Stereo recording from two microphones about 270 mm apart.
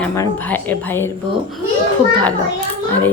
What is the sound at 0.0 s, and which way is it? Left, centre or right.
A woman's voice, centre.